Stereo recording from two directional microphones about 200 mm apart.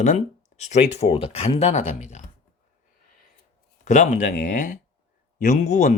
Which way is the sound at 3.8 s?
35° left (ahead or behind).